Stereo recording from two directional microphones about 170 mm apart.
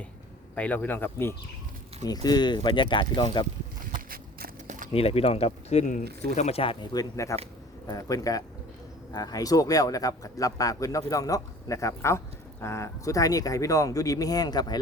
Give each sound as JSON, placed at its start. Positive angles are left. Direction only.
{"t": 0.5, "sound": "speech", "side_deg": 10}
{"t": 2.0, "sound": "speech", "side_deg": 25}
{"t": 3.9, "sound": "a sound", "side_deg": -60}
{"t": 4.9, "sound": "speech", "side_deg": 35}